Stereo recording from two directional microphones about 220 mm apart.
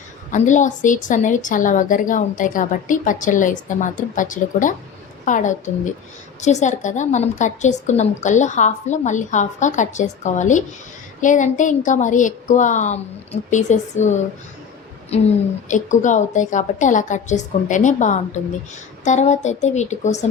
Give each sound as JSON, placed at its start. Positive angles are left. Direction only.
{"t": 0.3, "sound": "a woman's voice", "side_deg": 35}